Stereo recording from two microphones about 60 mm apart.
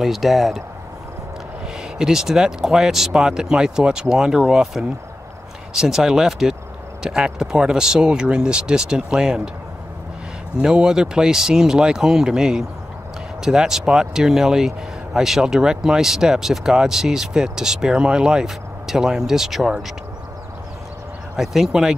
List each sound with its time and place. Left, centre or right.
0.0 s speech: centre
2.0 s speech: centre
10.6 s speech: centre
21.4 s speech: centre